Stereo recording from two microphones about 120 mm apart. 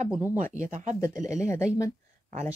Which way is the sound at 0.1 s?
15° right (ahead or behind).